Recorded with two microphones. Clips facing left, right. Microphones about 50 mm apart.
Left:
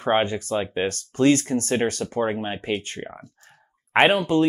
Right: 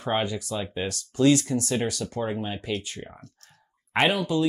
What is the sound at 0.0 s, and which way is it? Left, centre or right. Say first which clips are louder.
Speech: left 5 dB; left.